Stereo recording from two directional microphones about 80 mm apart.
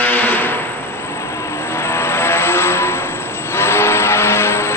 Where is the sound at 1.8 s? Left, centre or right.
Left.